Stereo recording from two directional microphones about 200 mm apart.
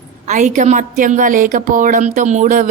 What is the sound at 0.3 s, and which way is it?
A woman's voice, 40° right (ahead or behind).